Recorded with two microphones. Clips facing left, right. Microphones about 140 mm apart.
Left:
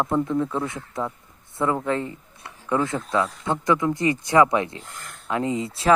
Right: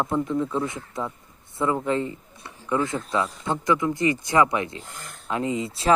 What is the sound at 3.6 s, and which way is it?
Speech, 30° left (ahead or behind).